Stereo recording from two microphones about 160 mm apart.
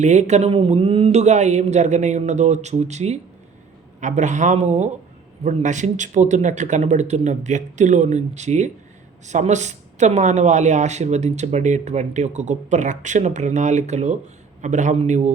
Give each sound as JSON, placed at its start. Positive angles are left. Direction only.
{"t": 0.0, "sound": "speech", "side_deg": -45}